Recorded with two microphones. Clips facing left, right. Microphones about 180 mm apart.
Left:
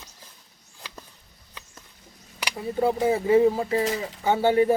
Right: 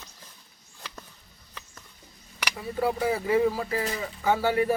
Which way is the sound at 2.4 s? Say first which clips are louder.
Left 3 dB; 25° left (ahead or behind).